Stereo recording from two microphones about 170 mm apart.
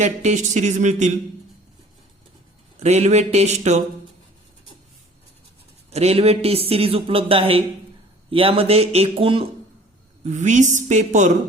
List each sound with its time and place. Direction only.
0.0 s speech: 45° right (ahead or behind)
2.8 s speech: 40° right (ahead or behind)
5.9 s speech: 40° right (ahead or behind)
10.2 s speech: 45° right (ahead or behind)